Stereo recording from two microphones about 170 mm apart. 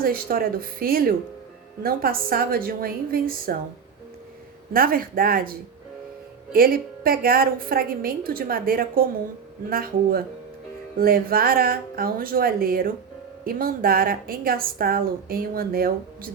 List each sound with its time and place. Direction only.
0.0 s a woman's voice: 60° right (ahead or behind)
4.7 s a woman's voice: 55° right (ahead or behind)